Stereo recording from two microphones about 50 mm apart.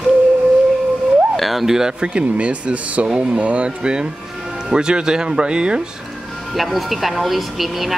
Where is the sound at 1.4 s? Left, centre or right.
Centre.